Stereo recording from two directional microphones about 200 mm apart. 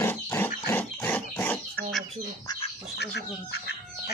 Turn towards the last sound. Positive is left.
turn(degrees=55)  # may be behind; listen again after turning